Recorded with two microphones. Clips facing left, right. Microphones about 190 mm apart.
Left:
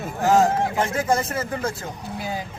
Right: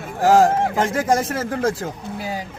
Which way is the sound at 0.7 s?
90° right.